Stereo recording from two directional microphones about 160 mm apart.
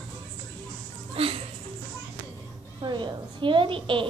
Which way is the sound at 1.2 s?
35° right (ahead or behind).